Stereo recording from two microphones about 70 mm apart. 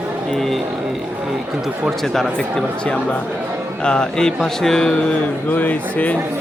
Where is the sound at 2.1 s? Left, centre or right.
Centre.